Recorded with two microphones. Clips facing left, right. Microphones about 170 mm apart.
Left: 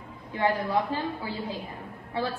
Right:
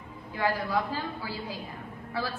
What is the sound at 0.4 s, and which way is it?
Speech, 20° left (ahead or behind).